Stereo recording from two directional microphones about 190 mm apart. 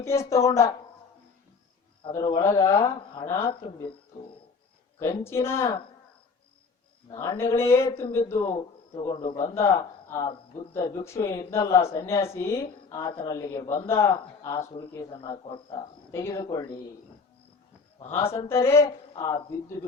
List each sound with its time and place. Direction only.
0.0 s speech: 15° left (ahead or behind)
2.0 s speech: 25° left (ahead or behind)
4.9 s speech: 15° left (ahead or behind)
7.1 s speech: 15° left (ahead or behind)
18.3 s speech: 15° left (ahead or behind)